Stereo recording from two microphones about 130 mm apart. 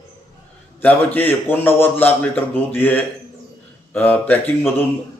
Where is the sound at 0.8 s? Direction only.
15° left (ahead or behind).